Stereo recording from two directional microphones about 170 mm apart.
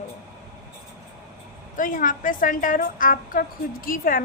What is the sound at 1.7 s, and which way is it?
A woman's voice, 50° left (ahead or behind).